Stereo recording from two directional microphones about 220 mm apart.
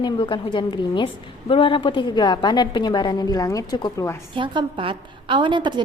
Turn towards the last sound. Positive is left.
turn(degrees=-20)  # may be behind; listen again after turning